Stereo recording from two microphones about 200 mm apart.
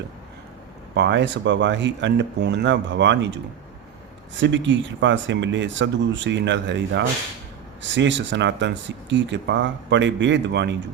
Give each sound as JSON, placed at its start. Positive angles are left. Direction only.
{"t": 0.9, "sound": "speech", "side_deg": -60}